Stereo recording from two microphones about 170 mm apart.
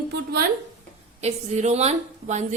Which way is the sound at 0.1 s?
75° right (ahead or behind).